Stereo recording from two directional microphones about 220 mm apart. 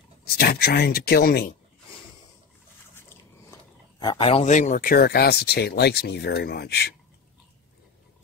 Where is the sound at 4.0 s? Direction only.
20° left (ahead or behind); by 6.9 s 50° left (ahead or behind).